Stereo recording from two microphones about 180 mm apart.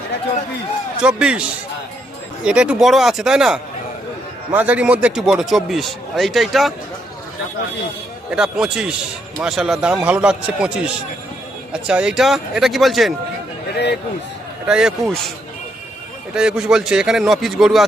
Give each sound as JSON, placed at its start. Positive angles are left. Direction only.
{"t": 1.0, "sound": "a man's voice", "side_deg": -5}
{"t": 8.3, "sound": "a man's voice", "side_deg": -5}
{"t": 13.7, "sound": "speech", "side_deg": 65}
{"t": 14.7, "sound": "a man's voice", "side_deg": -5}
{"t": 16.3, "sound": "a man's voice", "side_deg": -5}